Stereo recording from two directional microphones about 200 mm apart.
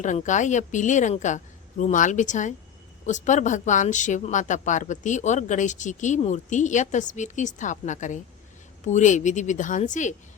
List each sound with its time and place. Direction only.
0.0 s speech: 40° left (ahead or behind)